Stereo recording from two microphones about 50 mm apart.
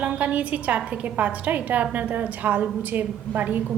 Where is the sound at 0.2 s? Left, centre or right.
Right.